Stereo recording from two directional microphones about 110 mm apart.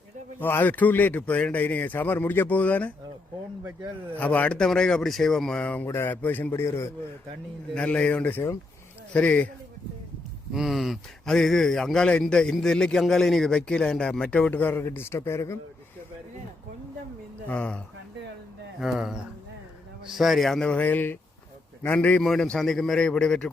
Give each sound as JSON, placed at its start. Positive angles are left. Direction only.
{"t": 0.3, "sound": "speech", "side_deg": 20}
{"t": 4.2, "sound": "speech", "side_deg": 15}
{"t": 7.8, "sound": "speech", "side_deg": 10}
{"t": 10.5, "sound": "speech", "side_deg": 0}
{"t": 17.5, "sound": "speech", "side_deg": 10}
{"t": 18.8, "sound": "speech", "side_deg": -5}